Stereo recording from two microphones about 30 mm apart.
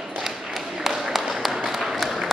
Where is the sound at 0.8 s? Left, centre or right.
Centre.